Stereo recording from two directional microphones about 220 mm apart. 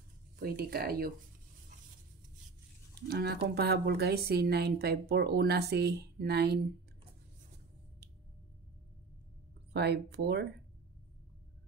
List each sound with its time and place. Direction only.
0.4 s speech: 40° right (ahead or behind)
2.9 s speech: 45° right (ahead or behind)
9.7 s speech: 50° right (ahead or behind)